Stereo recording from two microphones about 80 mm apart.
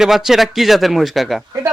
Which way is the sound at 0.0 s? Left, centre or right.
Centre.